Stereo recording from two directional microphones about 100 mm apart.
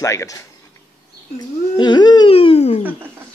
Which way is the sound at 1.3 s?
45° left (ahead or behind).